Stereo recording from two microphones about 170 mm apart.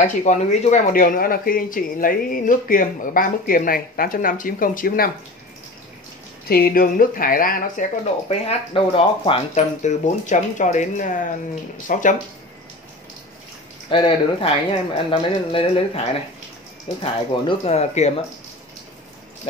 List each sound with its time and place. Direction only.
0.0 s speech: 45° left (ahead or behind)
6.5 s speech: 60° left (ahead or behind)
8.3 s speech: 35° left (ahead or behind)
13.8 s speech: 30° left (ahead or behind)